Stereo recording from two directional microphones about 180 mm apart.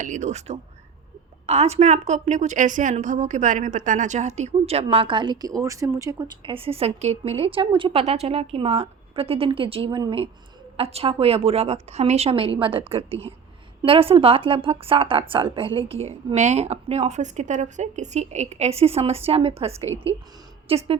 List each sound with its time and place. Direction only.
0.0 s a woman's voice: 45° right (ahead or behind)